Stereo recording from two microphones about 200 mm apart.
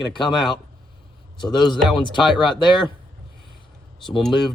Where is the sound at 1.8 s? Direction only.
Centre (ahead or behind).